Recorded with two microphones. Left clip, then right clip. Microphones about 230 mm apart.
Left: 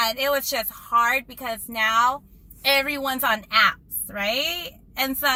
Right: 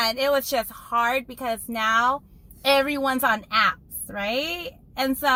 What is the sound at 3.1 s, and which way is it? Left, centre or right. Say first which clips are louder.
A woman's voice: left 3 dB; centre.